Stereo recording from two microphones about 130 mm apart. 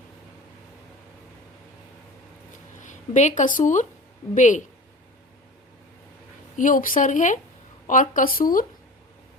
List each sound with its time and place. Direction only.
2.8 s speech: 70° left (ahead or behind)
6.6 s a woman's voice: 90° left
7.9 s speech: 90° left